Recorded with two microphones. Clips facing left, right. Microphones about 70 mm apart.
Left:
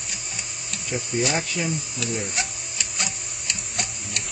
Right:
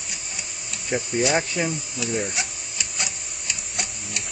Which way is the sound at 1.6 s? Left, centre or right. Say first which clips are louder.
Right 1 dB; centre.